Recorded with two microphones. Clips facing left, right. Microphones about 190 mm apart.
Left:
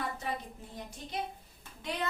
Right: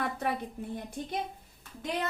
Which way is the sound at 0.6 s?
60° right (ahead or behind).